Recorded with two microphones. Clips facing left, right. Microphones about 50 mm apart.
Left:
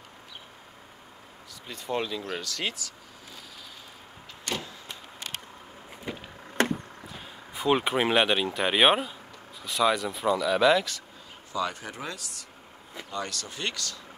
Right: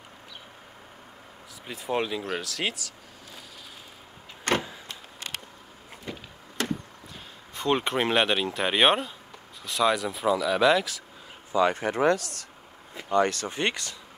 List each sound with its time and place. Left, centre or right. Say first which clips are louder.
1.7 s speech: right 2 dB; centre
2.4 s speech: right 2 dB; centre
4.5 s vehicle: right 8 dB; right
6.1 s a sound: left 1 dB; centre
6.6 s a sound: left 4 dB; left
7.5 s speech: left 1 dB; centre
11.5 s speech: right 7 dB; right
11.8 s speech: right 14 dB; right
13.1 s speech: right 11 dB; right